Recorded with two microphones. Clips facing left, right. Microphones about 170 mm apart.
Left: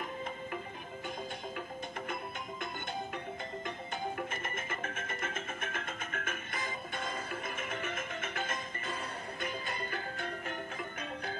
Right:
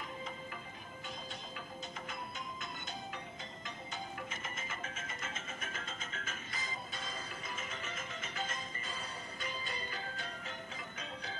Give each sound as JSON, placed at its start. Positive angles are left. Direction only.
{"t": 2.0, "sound": "music", "side_deg": 55}